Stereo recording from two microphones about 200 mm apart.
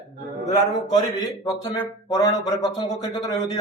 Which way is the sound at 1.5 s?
20° left (ahead or behind).